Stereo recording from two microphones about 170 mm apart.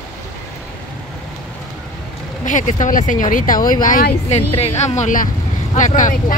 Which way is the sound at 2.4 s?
50° left (ahead or behind).